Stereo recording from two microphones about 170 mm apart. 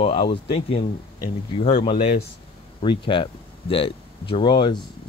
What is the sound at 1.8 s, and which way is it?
Speech, 35° left (ahead or behind).